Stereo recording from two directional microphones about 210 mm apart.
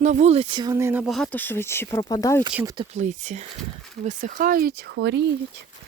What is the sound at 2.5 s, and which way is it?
Speech, 10° right (ahead or behind).